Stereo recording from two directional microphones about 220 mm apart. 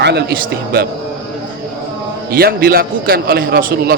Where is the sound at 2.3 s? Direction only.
45° right (ahead or behind).